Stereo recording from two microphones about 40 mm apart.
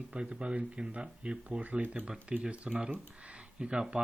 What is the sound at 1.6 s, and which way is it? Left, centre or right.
Speech, right.